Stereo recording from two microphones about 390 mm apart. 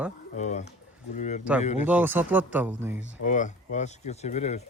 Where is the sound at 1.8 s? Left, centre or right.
Centre.